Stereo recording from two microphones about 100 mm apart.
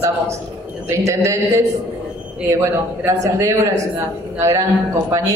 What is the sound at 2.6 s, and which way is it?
Speech, 30° right (ahead or behind).